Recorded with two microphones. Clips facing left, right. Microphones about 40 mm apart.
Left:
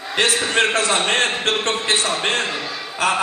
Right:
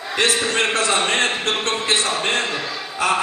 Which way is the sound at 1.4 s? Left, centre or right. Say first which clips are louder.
Left 1 dB; left.